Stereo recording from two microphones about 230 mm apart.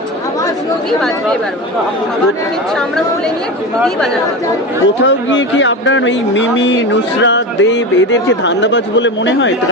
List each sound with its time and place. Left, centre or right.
0.9 s speech: centre
5.0 s speech: left